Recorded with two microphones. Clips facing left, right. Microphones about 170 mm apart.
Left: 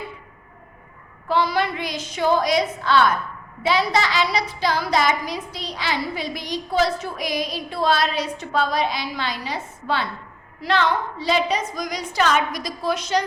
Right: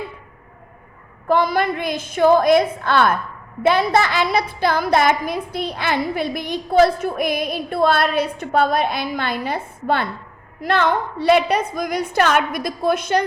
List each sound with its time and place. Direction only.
1.3 s a woman's voice: 50° right (ahead or behind)